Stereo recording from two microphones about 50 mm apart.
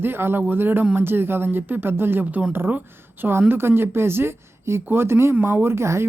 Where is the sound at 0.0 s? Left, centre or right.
Right.